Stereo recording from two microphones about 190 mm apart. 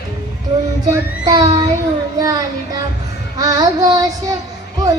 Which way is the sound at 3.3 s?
20° right (ahead or behind).